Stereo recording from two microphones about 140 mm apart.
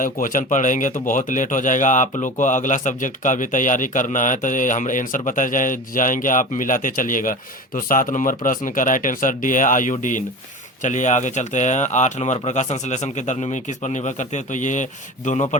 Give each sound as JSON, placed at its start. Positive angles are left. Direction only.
{"t": 0.0, "sound": "speech", "side_deg": 70}